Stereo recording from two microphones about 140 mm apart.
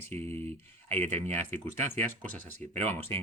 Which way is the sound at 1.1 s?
50° right (ahead or behind).